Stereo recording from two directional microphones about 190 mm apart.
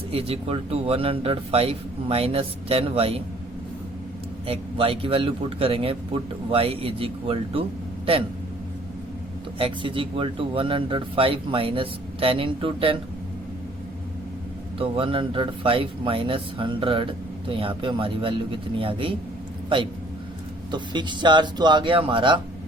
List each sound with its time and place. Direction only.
0.1 s speech: 30° right (ahead or behind)
4.4 s speech: 30° right (ahead or behind)
9.6 s speech: 30° right (ahead or behind)
14.8 s speech: 30° right (ahead or behind)
20.7 s speech: 25° right (ahead or behind)